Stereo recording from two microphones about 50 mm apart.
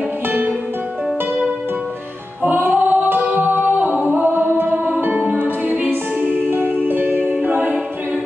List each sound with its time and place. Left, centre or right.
0.3 s music: right
2.4 s music: right
7.4 s a capella: right